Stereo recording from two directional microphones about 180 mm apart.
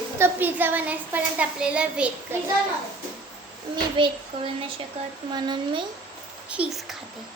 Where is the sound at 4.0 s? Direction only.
30° right (ahead or behind).